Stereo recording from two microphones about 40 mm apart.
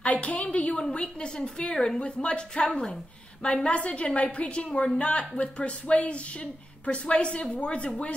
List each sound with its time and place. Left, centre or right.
0.0 s a woman's voice: left
3.6 s a woman's voice: left